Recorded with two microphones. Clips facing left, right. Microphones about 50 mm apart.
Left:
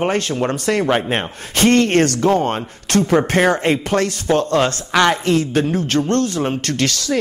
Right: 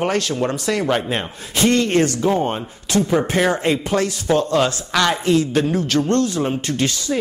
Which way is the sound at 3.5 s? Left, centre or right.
Left.